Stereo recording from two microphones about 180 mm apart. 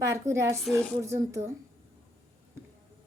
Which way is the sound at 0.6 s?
Centre (ahead or behind).